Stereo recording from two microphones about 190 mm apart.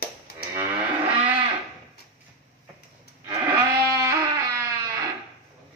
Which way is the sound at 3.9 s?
15° right (ahead or behind).